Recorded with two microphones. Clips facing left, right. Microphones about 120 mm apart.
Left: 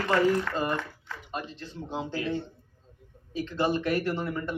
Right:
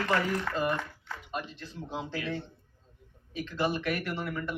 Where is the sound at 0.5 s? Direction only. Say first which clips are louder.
Left 1 dB; 30° left (ahead or behind).